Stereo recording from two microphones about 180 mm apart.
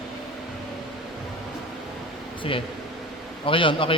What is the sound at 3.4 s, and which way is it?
Speech, 30° left (ahead or behind).